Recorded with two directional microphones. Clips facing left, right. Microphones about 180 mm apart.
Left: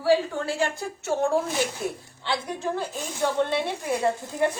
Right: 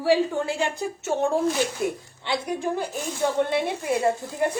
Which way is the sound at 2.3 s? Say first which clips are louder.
Right 2 dB; 15° right (ahead or behind).